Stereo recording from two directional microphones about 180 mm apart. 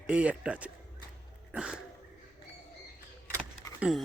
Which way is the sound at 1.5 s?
5° right (ahead or behind).